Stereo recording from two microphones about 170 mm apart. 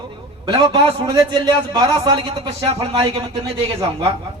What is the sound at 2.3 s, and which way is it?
Speech, 35° right (ahead or behind).